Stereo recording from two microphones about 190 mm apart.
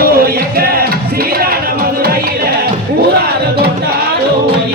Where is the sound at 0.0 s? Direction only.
50° right (ahead or behind).